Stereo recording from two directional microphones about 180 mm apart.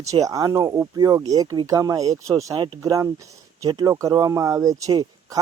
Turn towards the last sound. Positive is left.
turn(degrees=-20)  # may be behind; listen again after turning